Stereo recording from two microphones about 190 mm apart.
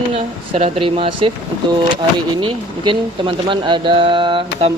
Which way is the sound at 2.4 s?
25° right (ahead or behind).